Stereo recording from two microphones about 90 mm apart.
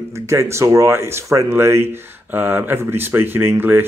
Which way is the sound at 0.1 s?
30° right (ahead or behind).